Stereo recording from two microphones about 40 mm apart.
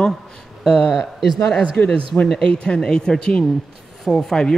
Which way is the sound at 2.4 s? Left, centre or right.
Left.